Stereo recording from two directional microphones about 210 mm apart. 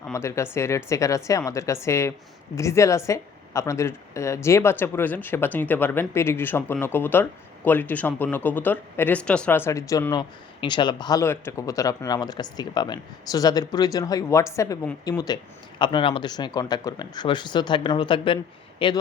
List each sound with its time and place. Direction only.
0.1 s a woman's voice: 15° left (ahead or behind)